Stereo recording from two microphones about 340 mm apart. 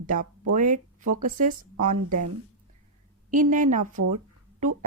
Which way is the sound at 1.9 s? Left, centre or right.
Right.